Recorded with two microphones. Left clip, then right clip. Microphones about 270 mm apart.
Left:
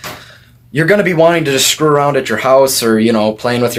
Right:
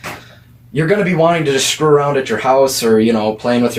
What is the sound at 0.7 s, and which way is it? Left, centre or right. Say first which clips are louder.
Speech: left 4 dB; left.